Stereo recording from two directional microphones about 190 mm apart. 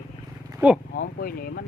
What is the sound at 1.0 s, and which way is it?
Speech, 50° left (ahead or behind).